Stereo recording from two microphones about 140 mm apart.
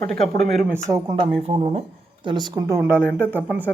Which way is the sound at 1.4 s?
45° right (ahead or behind).